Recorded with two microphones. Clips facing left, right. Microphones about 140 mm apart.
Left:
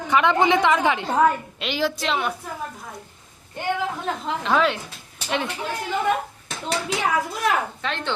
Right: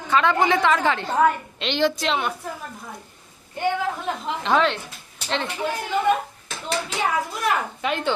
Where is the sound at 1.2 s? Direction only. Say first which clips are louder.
Even; 5° left (ahead or behind).